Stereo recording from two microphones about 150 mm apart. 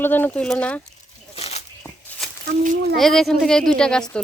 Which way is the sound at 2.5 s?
60° right (ahead or behind).